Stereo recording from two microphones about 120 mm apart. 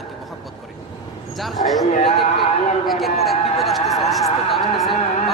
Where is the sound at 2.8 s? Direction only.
Centre (ahead or behind).